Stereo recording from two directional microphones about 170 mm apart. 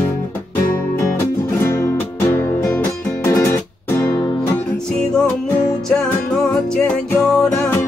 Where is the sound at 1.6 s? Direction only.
15° left (ahead or behind).